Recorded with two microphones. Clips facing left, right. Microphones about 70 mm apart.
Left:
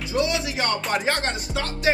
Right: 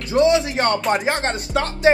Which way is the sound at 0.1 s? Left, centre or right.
Right.